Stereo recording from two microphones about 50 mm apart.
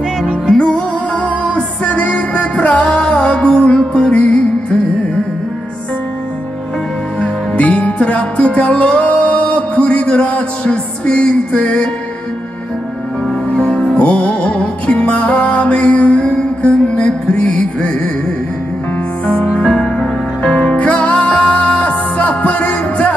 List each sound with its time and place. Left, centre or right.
0.6 s music: centre
7.2 s music: left
13.6 s music: centre
19.7 s music: left